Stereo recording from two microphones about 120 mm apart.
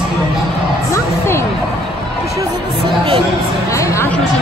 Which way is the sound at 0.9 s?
20° left (ahead or behind).